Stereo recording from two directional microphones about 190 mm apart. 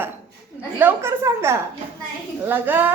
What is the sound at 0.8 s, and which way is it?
Music, 10° right (ahead or behind).